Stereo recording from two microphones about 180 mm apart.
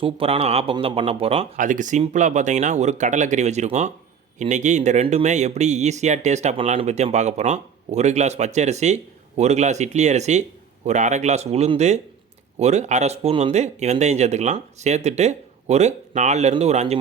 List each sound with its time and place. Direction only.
0.0 s speech: 30° right (ahead or behind)
1.5 s speech: 45° right (ahead or behind)